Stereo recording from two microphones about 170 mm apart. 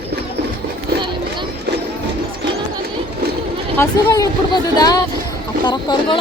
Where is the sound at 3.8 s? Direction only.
20° left (ahead or behind).